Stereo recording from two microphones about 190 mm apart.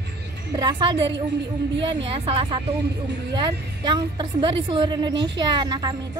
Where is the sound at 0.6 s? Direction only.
25° right (ahead or behind).